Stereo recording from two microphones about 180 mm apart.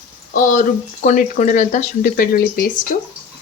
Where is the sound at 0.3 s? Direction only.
45° left (ahead or behind).